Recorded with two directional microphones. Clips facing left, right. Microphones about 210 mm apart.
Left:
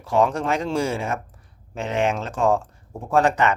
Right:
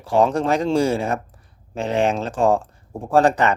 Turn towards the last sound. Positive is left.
turn(degrees=-35)  # may be behind; listen again after turning